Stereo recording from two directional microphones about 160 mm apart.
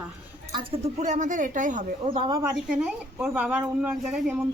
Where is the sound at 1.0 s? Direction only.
50° right (ahead or behind).